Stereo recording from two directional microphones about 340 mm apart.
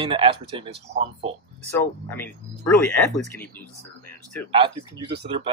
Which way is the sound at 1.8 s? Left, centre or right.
Centre.